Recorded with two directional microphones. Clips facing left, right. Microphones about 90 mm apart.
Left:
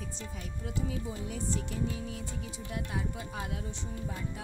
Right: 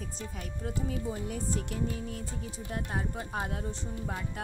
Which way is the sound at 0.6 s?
45° right (ahead or behind).